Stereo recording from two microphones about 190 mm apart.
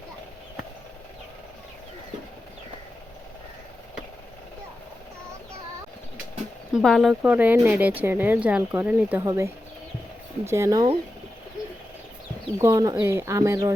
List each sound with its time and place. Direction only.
6.7 s speech: centre (ahead or behind); by 10.8 s 15° right (ahead or behind)
12.5 s speech: 15° right (ahead or behind)